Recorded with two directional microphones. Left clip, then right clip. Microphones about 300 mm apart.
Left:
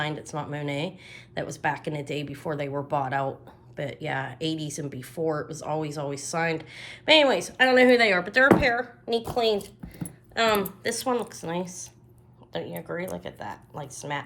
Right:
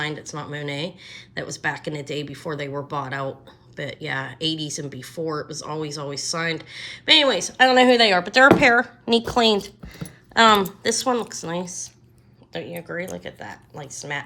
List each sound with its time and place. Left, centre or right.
0.0 s a woman's voice: centre
12.9 s speech: centre